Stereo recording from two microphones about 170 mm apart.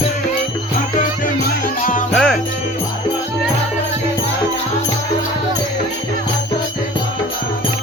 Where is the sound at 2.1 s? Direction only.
Centre (ahead or behind).